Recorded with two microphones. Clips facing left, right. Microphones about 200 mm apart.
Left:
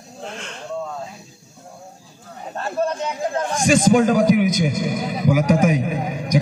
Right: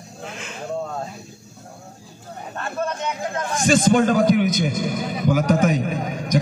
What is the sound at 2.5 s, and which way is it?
A man's voice, 35° left (ahead or behind).